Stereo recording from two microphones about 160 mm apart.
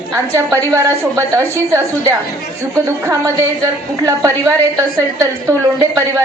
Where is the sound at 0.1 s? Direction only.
15° right (ahead or behind).